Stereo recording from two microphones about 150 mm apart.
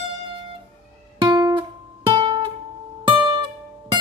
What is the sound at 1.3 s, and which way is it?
Music, 25° right (ahead or behind).